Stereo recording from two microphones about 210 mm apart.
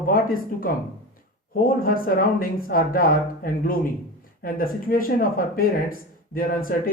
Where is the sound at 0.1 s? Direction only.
45° left (ahead or behind).